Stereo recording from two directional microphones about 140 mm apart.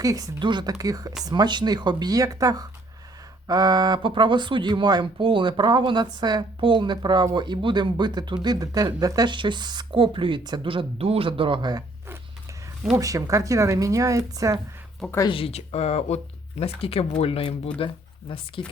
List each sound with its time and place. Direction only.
0.0 s speech: 25° right (ahead or behind)
13.0 s speech: 25° right (ahead or behind)
15.3 s speech: 45° left (ahead or behind)